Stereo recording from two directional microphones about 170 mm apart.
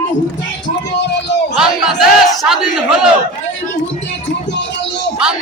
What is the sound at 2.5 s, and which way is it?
Battle cry, 5° right (ahead or behind).